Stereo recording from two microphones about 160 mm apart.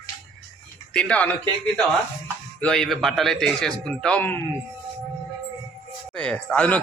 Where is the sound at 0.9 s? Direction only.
5° left (ahead or behind).